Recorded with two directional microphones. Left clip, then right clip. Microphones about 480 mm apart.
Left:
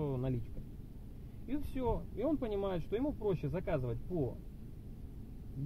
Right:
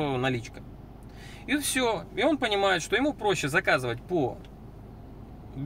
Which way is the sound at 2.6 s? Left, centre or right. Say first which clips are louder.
Right 12 dB; centre.